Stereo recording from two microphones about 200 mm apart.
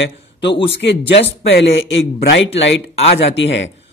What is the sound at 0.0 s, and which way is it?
A man's voice, 60° left (ahead or behind).